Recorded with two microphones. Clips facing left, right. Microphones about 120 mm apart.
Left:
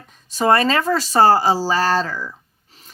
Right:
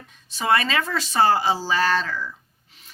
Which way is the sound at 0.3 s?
40° left (ahead or behind).